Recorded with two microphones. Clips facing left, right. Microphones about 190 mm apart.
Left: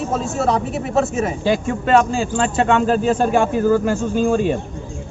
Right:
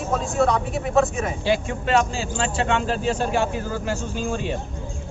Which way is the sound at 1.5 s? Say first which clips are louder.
Left 5 dB; 45° left (ahead or behind).